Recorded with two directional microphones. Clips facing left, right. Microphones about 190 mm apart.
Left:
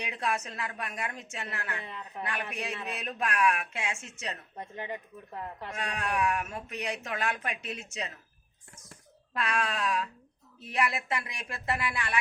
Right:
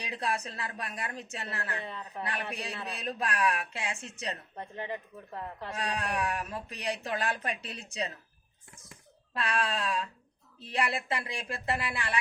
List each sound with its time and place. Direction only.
0.0 s speech: 35° right (ahead or behind)
5.6 s speech: 35° right (ahead or behind)
9.3 s speech: 30° right (ahead or behind)